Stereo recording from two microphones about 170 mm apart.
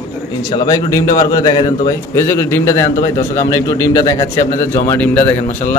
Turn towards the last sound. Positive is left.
turn(degrees=15)  # may be behind; listen again after turning